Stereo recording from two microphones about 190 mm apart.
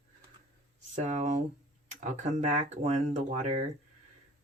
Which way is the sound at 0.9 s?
40° right (ahead or behind).